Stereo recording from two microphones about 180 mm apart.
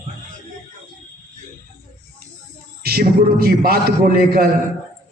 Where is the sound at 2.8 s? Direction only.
60° right (ahead or behind).